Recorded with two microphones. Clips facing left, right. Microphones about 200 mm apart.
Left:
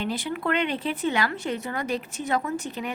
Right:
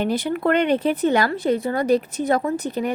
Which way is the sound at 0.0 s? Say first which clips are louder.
Right 7 dB; 45° right (ahead or behind).